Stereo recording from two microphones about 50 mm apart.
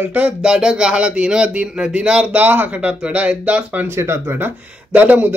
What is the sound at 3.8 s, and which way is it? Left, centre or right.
Speech, right.